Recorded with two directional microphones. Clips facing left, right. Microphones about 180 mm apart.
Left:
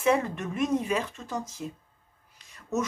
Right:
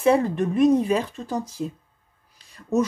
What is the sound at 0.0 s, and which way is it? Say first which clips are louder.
Speech: right 6 dB; 35° right (ahead or behind).